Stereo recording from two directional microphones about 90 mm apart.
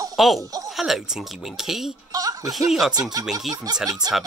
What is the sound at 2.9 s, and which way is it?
Speech, 45° right (ahead or behind).